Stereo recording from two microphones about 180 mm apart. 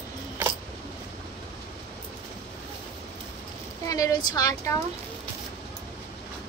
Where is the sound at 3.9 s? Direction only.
20° left (ahead or behind).